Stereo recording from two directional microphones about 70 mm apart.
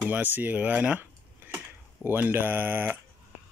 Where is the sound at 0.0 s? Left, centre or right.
Right.